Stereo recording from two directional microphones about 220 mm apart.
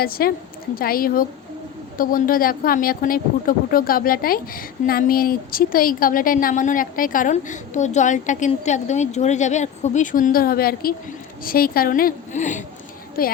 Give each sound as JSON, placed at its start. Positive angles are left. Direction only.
{"t": 0.0, "sound": "a woman's voice", "side_deg": 45}